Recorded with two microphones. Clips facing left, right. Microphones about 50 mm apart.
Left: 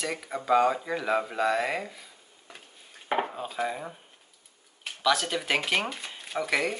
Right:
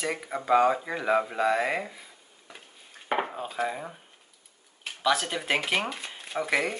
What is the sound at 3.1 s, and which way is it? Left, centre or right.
Dishes, centre.